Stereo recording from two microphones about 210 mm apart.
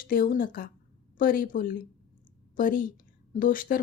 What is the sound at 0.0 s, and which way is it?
Speech, 45° left (ahead or behind).